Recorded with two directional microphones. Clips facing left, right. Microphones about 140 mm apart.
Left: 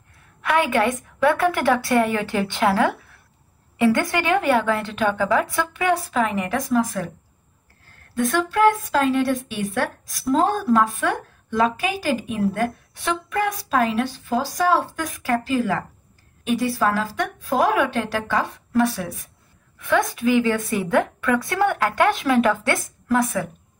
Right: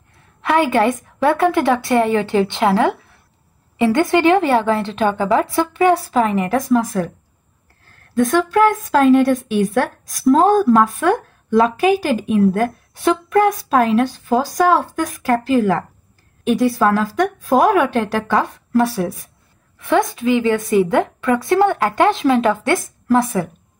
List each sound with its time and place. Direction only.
0.4 s a woman's voice: 30° right (ahead or behind)
8.1 s a woman's voice: 45° right (ahead or behind)
19.9 s a woman's voice: 25° right (ahead or behind)